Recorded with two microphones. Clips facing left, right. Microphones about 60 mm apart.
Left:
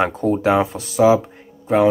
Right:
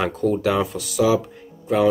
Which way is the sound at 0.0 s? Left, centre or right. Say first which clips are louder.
Left 3 dB; left.